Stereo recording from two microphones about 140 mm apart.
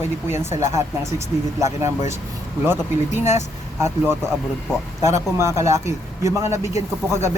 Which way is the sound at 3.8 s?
20° right (ahead or behind).